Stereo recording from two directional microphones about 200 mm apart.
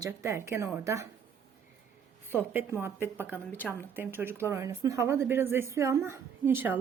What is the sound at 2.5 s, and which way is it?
Speech, 10° right (ahead or behind).